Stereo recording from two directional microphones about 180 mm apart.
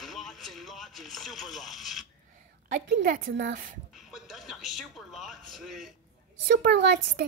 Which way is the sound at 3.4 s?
70° right (ahead or behind).